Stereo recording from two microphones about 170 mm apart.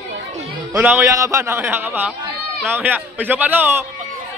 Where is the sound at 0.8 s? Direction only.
15° right (ahead or behind).